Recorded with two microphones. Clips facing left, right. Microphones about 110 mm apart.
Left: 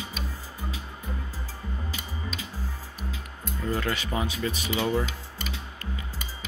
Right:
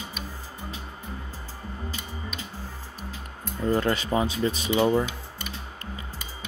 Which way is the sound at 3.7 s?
30° right (ahead or behind).